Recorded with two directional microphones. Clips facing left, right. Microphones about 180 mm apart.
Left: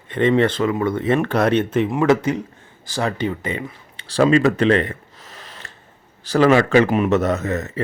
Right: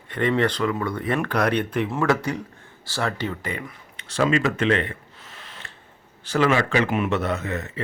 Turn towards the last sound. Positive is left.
turn(degrees=40)  # may be behind; listen again after turning